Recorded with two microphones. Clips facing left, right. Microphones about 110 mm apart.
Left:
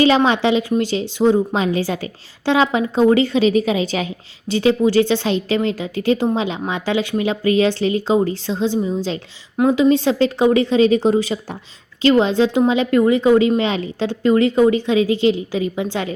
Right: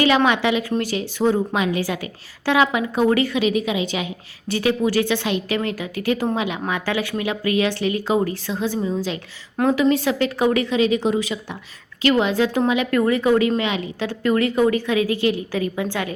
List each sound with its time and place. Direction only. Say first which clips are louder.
0.0 s a woman's voice: left 3 dB; 30° left (ahead or behind)
4.4 s a woman's voice: left 4 dB; 25° left (ahead or behind)